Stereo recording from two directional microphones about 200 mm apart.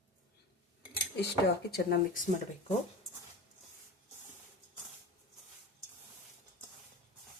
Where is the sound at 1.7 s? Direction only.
45° left (ahead or behind).